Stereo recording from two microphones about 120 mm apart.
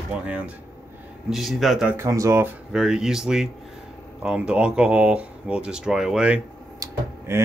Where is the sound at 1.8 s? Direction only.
25° right (ahead or behind).